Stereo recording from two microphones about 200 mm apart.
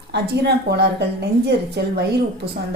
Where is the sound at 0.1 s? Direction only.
55° right (ahead or behind).